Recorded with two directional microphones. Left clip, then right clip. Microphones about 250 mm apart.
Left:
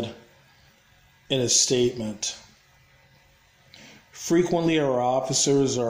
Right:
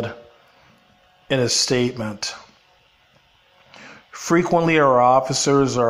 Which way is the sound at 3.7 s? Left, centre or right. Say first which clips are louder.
Right 7 dB; centre.